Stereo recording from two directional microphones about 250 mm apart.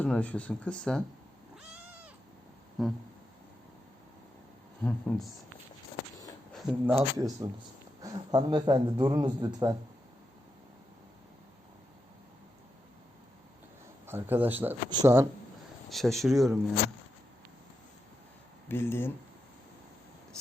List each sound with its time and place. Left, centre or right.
0.0 s speech: centre
2.8 s speech: centre
4.8 s speech: centre
6.5 s a man's voice: centre
14.1 s a man's voice: centre
15.9 s speech: centre
18.7 s speech: centre